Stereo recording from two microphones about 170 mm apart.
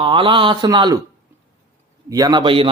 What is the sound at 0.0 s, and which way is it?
Speech, 30° right (ahead or behind).